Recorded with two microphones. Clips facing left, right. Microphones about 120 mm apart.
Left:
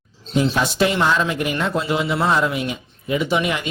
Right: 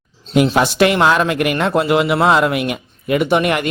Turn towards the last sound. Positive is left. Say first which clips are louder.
# right 5 dB
turn(degrees=-60)  # may be behind; listen again after turning